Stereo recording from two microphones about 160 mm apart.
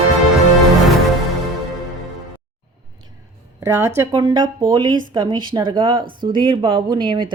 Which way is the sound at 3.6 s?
20° right (ahead or behind).